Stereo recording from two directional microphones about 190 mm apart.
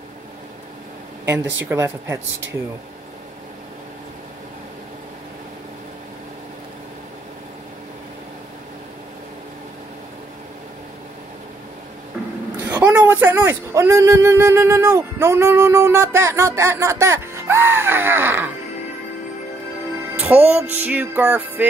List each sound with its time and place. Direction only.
1.2 s a man's voice: 15° right (ahead or behind)
12.8 s a man's voice: 10° right (ahead or behind)
20.2 s a man's voice: 5° right (ahead or behind)